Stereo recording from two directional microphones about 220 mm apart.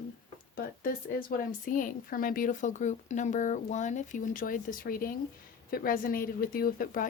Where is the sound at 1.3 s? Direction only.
35° left (ahead or behind).